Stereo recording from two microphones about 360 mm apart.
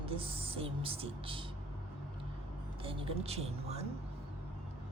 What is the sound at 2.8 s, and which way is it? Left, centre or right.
Speech, centre.